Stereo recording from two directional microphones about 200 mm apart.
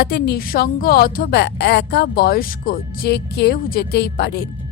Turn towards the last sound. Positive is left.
turn(degrees=55)  # may be behind; listen again after turning